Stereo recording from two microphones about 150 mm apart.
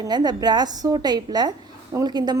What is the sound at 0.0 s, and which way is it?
A woman's voice, 25° right (ahead or behind).